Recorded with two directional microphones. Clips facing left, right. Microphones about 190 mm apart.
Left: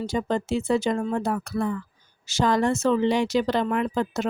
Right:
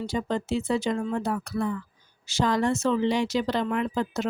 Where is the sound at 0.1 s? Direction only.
45° left (ahead or behind).